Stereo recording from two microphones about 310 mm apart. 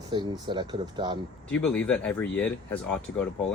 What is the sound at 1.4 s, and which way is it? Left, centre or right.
Speech, centre.